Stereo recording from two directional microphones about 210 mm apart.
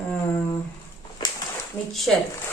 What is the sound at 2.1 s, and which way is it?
Speech, centre (ahead or behind).